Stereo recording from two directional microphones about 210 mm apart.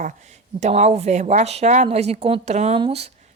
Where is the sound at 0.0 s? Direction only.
35° right (ahead or behind).